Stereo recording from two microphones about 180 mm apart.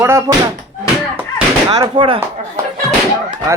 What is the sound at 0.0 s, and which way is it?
Speech, 15° right (ahead or behind).